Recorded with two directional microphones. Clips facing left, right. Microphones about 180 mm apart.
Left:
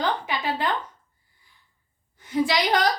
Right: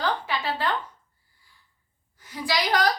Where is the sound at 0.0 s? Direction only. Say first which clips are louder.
Left 1 dB; 20° left (ahead or behind).